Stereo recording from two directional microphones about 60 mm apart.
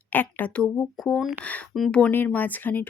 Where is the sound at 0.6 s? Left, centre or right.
Centre.